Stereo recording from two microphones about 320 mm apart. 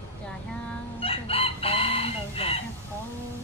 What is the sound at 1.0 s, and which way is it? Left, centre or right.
Chicken, centre.